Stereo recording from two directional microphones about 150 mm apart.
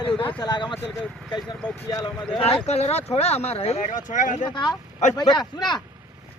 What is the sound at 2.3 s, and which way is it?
Speech, 40° left (ahead or behind).